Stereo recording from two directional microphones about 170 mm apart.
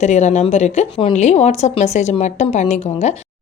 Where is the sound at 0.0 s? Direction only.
45° left (ahead or behind).